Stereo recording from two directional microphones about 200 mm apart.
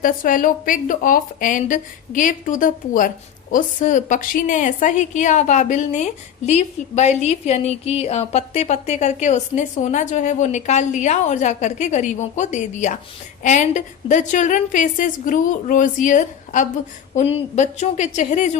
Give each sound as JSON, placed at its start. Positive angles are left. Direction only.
{"t": 0.0, "sound": "a woman's voice", "side_deg": 45}